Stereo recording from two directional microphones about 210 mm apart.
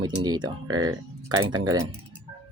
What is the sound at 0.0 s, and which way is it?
Speech, 20° right (ahead or behind).